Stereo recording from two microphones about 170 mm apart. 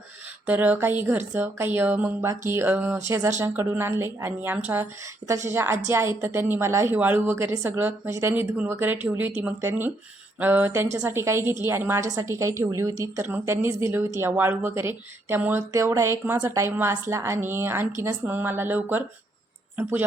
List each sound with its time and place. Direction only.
0.4 s a woman's voice: 10° right (ahead or behind)